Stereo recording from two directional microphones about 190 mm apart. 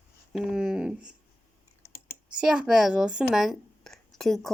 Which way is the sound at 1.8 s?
55° left (ahead or behind).